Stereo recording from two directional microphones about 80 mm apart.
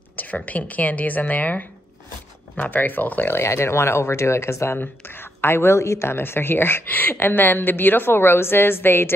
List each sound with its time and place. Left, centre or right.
0.1 s a woman's voice: left